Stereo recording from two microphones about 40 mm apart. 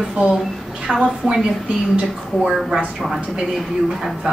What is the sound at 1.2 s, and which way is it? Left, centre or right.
Speech, centre.